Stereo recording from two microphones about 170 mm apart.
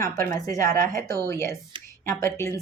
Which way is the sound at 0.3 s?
20° left (ahead or behind).